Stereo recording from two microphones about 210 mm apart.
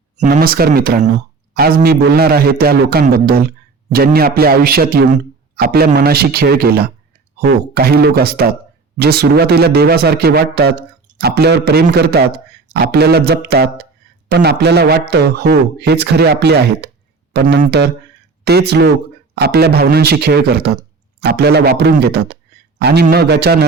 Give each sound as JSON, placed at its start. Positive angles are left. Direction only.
{"t": 0.2, "sound": "a man's voice", "side_deg": -40}